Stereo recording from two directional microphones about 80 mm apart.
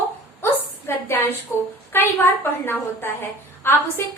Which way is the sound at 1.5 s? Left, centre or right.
Left.